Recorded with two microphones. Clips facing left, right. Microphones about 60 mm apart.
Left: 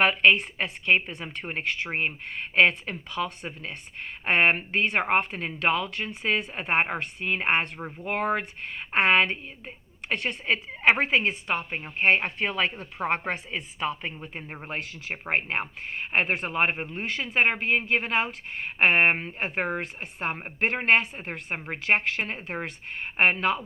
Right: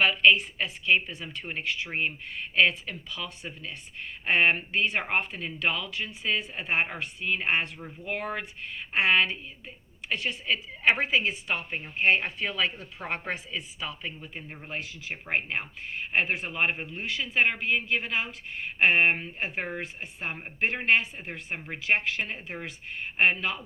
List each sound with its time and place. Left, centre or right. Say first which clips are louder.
0.0 s a woman's voice: left 1 dB; left
1.9 s a woman's voice: left 2 dB; left
10.4 s a woman's voice: left 3 dB; left